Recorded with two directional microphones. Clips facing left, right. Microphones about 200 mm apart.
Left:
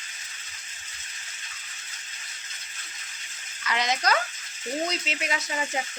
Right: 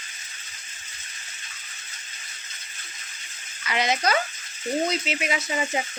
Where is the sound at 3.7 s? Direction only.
10° right (ahead or behind).